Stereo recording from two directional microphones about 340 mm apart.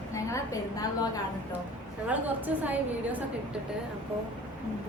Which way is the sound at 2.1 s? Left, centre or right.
Centre.